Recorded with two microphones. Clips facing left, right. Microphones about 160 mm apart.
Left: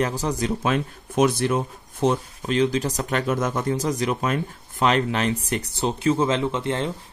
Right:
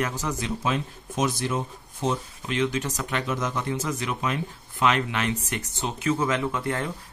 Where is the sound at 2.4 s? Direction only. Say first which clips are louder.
Left 5 dB; 35° left (ahead or behind).